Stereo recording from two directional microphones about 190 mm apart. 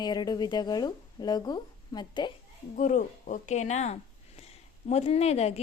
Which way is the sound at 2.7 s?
40° left (ahead or behind).